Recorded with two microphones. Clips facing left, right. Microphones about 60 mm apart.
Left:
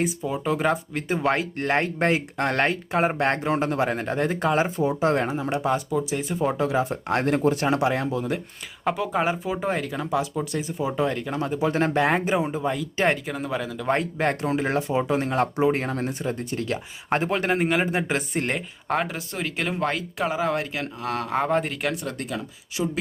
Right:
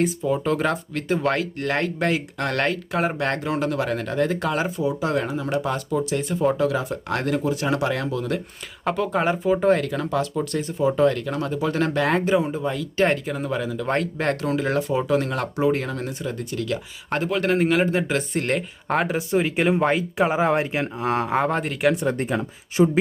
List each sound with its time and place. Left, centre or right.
0.0 s speech: centre; by 4.7 s left
4.8 s speech: left
5.5 s speech: centre
5.9 s speech: centre
6.6 s speech: left
7.3 s speech: left
7.7 s speech: left
8.8 s speech: centre
13.8 s speech: centre
17.4 s speech: centre
18.5 s speech: centre
19.1 s speech: centre
21.3 s speech: centre
22.0 s speech: right